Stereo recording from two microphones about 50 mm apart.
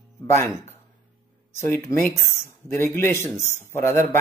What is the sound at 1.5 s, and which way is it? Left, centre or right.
Speech, left.